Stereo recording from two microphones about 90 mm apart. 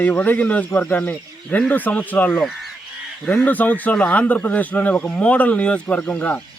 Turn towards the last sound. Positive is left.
turn(degrees=15)  # may be behind; listen again after turning